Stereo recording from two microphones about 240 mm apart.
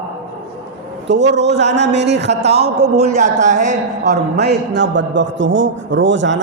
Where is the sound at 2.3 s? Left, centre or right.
Right.